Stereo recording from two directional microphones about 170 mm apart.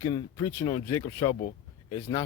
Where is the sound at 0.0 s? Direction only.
20° left (ahead or behind).